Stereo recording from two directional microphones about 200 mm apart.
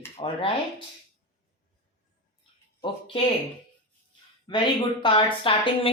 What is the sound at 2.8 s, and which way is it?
Speech, 25° left (ahead or behind).